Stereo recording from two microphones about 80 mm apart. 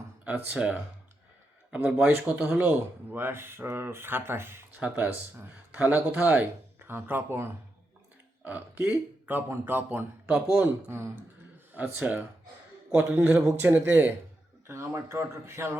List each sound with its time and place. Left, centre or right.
0.3 s speech: centre; by 11.1 s right
11.7 s a man's voice: right
13.6 s speech: right
14.7 s speech: right